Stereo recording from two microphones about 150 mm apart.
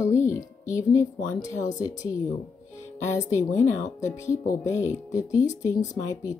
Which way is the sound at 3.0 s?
50° left (ahead or behind).